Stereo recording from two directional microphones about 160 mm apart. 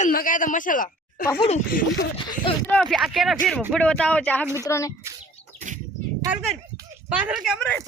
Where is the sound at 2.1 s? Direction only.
30° left (ahead or behind).